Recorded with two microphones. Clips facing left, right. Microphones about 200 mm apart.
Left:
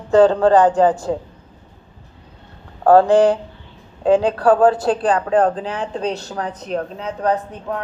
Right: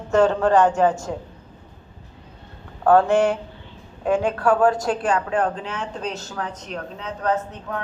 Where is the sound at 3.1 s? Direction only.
35° left (ahead or behind).